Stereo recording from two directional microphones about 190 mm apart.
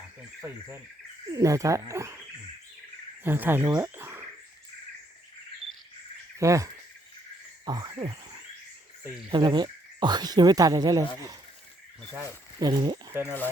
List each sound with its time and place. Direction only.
1.3 s speech: 15° right (ahead or behind)
3.2 s speech: 10° right (ahead or behind)
6.4 s speech: 15° right (ahead or behind)
9.3 s speech: 25° right (ahead or behind)
12.5 s speech: 20° right (ahead or behind)
13.2 s speech: 10° left (ahead or behind)